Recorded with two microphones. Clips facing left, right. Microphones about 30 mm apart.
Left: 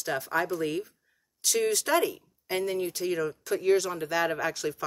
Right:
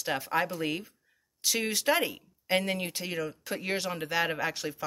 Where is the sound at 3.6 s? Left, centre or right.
Right.